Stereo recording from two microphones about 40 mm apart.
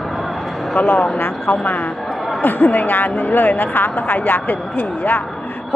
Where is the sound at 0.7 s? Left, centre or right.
Left.